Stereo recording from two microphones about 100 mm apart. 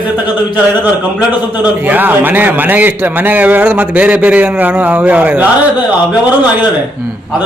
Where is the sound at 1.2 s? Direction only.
15° right (ahead or behind).